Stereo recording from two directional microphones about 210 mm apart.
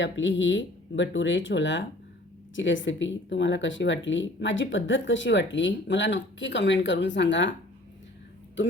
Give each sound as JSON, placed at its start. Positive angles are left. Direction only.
{"t": 0.0, "sound": "speech", "side_deg": 60}